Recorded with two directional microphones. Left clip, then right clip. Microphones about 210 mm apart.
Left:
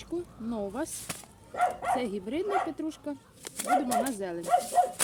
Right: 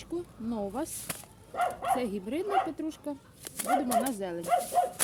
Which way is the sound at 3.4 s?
10° right (ahead or behind).